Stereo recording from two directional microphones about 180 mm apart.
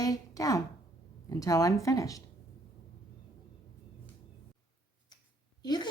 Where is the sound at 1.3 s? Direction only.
20° left (ahead or behind).